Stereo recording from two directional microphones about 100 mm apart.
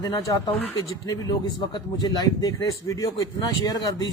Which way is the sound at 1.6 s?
40° left (ahead or behind).